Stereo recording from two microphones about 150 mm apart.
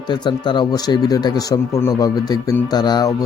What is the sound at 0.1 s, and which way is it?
Speech, 30° left (ahead or behind).